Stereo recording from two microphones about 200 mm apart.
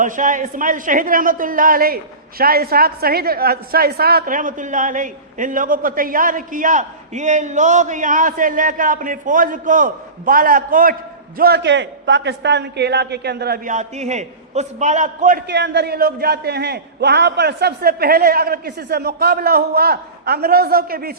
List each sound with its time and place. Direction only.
0.0 s a woman's voice: 40° right (ahead or behind)
13.7 s a man's voice: 35° right (ahead or behind)
15.4 s a woman's voice: 60° right (ahead or behind)